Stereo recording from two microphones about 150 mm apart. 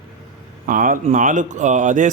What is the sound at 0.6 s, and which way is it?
Speech, 65° right (ahead or behind).